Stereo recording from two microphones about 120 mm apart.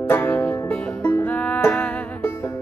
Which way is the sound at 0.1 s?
15° left (ahead or behind).